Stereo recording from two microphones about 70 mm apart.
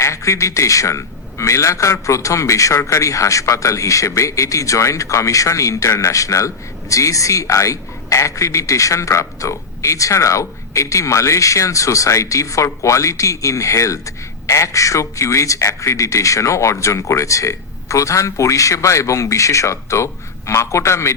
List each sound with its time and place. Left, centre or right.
0.0 s a man's voice: left